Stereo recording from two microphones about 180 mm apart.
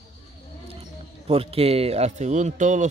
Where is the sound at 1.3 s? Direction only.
35° right (ahead or behind).